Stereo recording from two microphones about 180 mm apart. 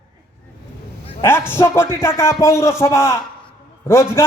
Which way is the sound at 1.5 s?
15° left (ahead or behind).